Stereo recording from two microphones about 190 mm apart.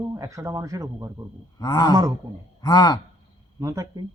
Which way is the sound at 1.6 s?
20° left (ahead or behind).